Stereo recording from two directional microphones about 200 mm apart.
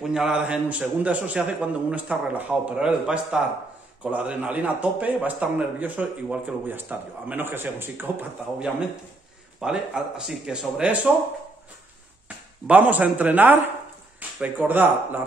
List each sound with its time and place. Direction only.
0.0 s a man's voice: 5° right (ahead or behind)
12.6 s a man's voice: 10° right (ahead or behind)